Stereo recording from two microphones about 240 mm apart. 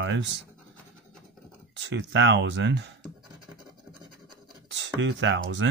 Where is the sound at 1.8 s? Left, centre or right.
Right.